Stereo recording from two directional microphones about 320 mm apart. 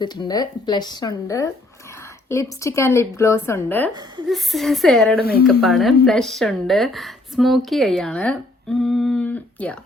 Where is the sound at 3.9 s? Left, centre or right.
Centre.